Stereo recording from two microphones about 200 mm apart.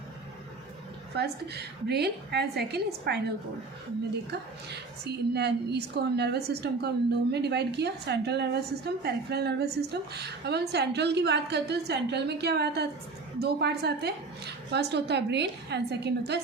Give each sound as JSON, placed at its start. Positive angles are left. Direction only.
{"t": 1.1, "sound": "a woman's voice", "side_deg": -55}
{"t": 4.3, "sound": "a woman's voice", "side_deg": -55}